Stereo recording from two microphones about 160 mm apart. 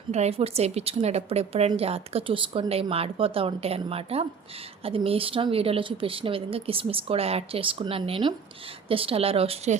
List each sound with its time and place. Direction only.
0.1 s a woman's voice: 40° right (ahead or behind)